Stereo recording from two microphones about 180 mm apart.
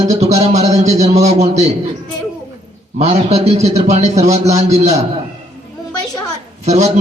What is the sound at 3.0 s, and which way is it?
A man's voice, 35° right (ahead or behind).